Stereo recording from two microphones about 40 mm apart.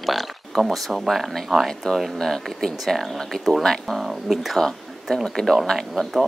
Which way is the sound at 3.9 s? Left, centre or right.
Centre.